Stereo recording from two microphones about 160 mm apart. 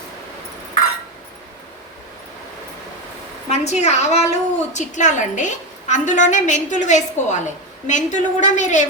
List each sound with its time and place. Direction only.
3.5 s a woman's voice: 45° left (ahead or behind)